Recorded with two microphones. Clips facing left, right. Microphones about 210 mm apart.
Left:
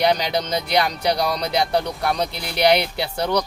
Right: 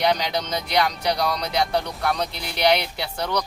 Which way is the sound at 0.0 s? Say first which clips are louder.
Left 3 dB; 35° left (ahead or behind).